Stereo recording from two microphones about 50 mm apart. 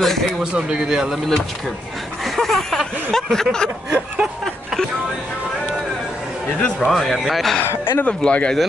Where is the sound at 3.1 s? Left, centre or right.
Centre.